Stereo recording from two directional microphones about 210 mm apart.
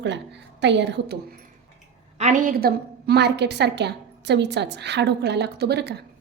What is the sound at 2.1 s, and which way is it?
A woman's voice, 35° right (ahead or behind).